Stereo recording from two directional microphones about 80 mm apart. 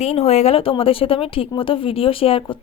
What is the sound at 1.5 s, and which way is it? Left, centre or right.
Speech, left.